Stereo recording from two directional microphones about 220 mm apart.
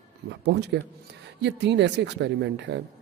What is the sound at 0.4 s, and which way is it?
Speech, 50° right (ahead or behind).